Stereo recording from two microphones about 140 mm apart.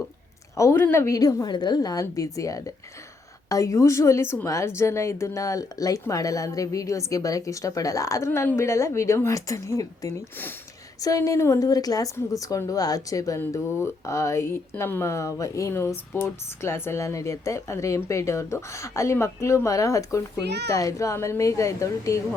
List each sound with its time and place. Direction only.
0.5 s a woman's voice: 20° left (ahead or behind)